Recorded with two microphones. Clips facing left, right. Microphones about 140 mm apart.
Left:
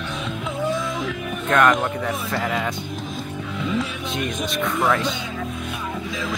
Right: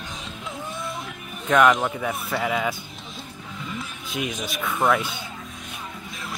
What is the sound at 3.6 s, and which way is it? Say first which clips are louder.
Music: left 10 dB; 90° left.